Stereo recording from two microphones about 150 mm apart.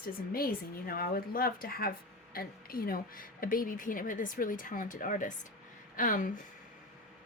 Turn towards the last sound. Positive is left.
turn(degrees=60)  # may be behind; listen again after turning